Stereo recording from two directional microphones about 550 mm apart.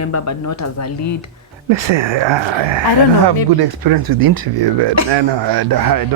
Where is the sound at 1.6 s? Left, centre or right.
Right.